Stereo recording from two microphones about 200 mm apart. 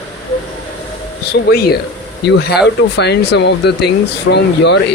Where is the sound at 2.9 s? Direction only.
55° left (ahead or behind).